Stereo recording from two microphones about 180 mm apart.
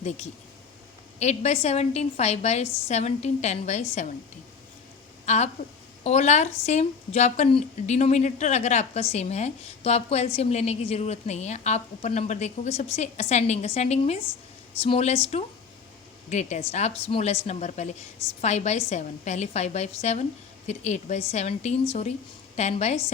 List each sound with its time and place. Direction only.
1.2 s a woman's voice: 40° left (ahead or behind)
5.2 s a woman's voice: 40° left (ahead or behind)